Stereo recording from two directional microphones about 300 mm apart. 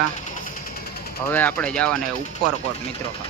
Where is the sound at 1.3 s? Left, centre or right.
Centre.